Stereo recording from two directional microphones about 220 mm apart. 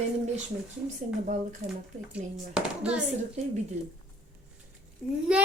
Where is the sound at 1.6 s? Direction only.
30° right (ahead or behind).